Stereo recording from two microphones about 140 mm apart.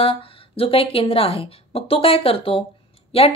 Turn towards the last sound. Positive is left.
turn(degrees=45)  # may be behind; listen again after turning